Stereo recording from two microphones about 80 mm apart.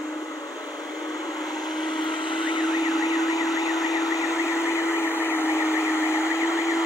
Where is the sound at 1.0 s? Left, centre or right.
Left.